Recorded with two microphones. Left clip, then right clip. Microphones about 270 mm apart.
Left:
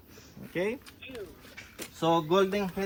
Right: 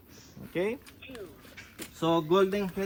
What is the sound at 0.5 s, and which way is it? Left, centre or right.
Speech, right.